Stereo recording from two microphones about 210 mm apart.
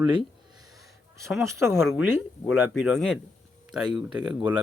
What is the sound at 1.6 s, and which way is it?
Speech, 10° right (ahead or behind).